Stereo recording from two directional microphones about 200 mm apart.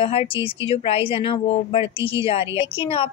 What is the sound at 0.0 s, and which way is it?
A woman's voice, 25° left (ahead or behind).